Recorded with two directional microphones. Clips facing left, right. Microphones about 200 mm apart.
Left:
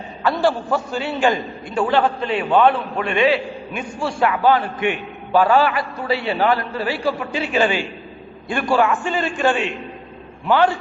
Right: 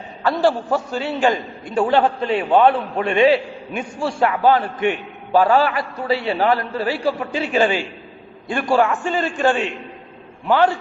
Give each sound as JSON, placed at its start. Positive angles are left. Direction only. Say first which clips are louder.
{"t": 0.2, "sound": "a man's voice", "louder": "right 1 dB", "side_deg": -35}